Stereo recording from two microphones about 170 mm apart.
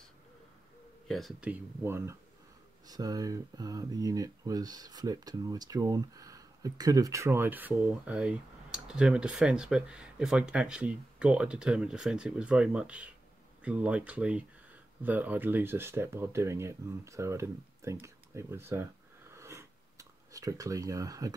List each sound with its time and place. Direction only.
1.0 s speech: centre (ahead or behind)
1.5 s speech: 15° right (ahead or behind)
19.3 s a sound: 15° right (ahead or behind)